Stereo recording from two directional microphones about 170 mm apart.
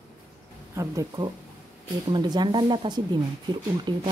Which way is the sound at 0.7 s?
20° right (ahead or behind).